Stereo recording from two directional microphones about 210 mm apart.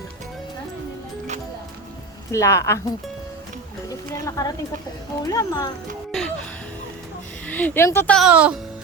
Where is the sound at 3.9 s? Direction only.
15° left (ahead or behind).